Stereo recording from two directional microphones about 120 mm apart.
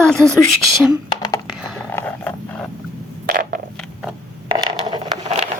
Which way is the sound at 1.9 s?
15° left (ahead or behind).